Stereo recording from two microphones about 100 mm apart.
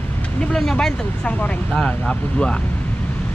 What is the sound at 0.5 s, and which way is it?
Speech, 5° left (ahead or behind).